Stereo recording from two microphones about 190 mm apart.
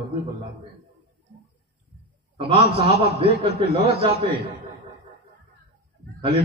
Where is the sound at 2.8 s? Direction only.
55° left (ahead or behind).